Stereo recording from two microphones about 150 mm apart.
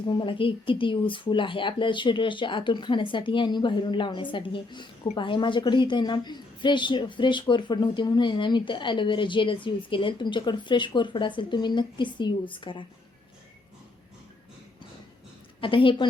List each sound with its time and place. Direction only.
0.0 s a woman's voice: 30° left (ahead or behind)
15.6 s a woman's voice: 35° left (ahead or behind)